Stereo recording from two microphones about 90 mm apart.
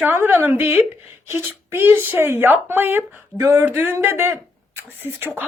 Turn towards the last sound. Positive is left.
turn(degrees=-20)  # may be behind; listen again after turning